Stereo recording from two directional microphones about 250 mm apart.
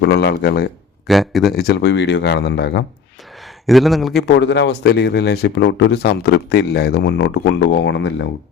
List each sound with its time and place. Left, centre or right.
0.0 s a man's voice: left
1.0 s a man's voice: centre
1.5 s speech: left
3.7 s a man's voice: centre
4.3 s speech: left